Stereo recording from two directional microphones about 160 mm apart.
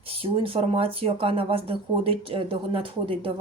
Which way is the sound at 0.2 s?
35° right (ahead or behind).